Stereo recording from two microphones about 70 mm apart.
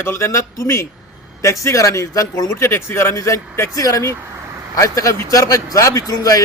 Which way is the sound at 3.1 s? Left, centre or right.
Left.